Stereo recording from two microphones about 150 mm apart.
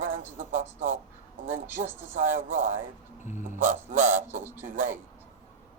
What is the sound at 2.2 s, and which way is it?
Speech, 55° right (ahead or behind).